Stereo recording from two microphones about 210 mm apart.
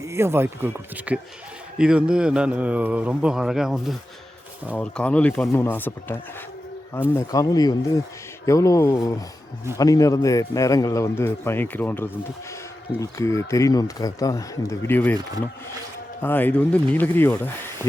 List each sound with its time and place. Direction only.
0.0 s a man's voice: 15° right (ahead or behind); by 15.1 s 10° left (ahead or behind)
16.2 s a man's voice: 10° left (ahead or behind)